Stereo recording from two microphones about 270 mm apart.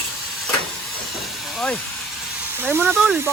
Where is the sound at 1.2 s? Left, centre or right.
Centre.